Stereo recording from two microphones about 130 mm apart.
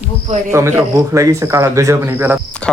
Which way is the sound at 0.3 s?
60° right (ahead or behind).